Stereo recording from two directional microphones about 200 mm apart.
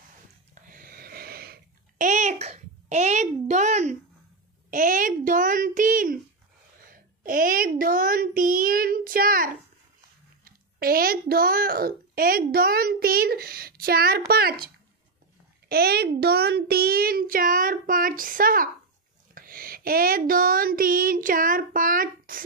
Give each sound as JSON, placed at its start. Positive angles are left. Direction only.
{"t": 0.7, "sound": "babbling", "side_deg": -45}
{"t": 4.6, "sound": "a child's voice", "side_deg": -40}
{"t": 15.7, "sound": "a child's voice", "side_deg": -50}